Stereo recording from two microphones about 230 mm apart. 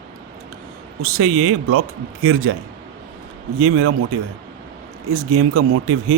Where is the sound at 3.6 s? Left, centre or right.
Right.